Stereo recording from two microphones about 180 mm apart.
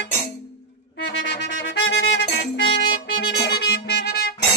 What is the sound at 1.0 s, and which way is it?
Music, 80° left.